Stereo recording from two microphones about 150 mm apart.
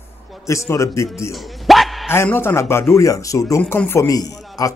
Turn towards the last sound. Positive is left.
turn(degrees=25)  # may be behind; listen again after turning